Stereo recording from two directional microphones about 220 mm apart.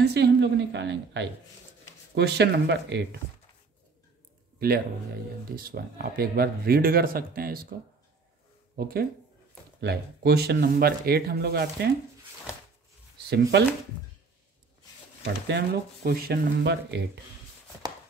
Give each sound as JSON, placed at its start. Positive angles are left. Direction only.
{"t": 0.1, "sound": "speech", "side_deg": -50}
{"t": 4.6, "sound": "speech", "side_deg": -45}
{"t": 8.7, "sound": "speech", "side_deg": -45}
{"t": 13.3, "sound": "speech", "side_deg": -50}
{"t": 15.4, "sound": "speech", "side_deg": -45}